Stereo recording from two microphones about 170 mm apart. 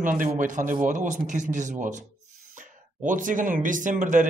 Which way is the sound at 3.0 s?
50° right (ahead or behind).